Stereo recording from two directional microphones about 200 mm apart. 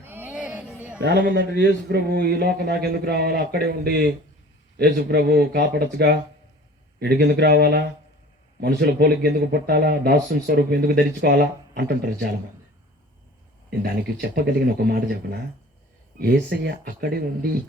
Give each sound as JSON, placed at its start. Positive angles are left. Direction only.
{"t": 0.0, "sound": "a sound", "side_deg": -10}
{"t": 1.0, "sound": "speech", "side_deg": -55}
{"t": 13.7, "sound": "speech", "side_deg": -50}